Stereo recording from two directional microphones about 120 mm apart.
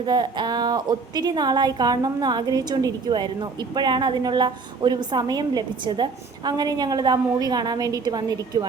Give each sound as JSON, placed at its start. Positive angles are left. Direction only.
{"t": 0.0, "sound": "a woman's voice", "side_deg": -40}